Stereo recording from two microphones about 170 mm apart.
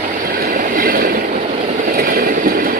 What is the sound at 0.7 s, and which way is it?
Train, 60° right (ahead or behind).